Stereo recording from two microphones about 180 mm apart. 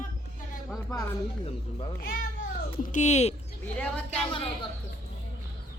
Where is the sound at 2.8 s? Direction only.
45° left (ahead or behind).